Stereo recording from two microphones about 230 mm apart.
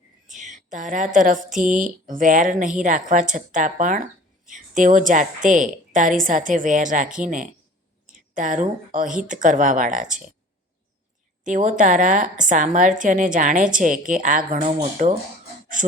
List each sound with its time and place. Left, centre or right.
0.3 s a woman's voice: right
11.4 s a woman's voice: right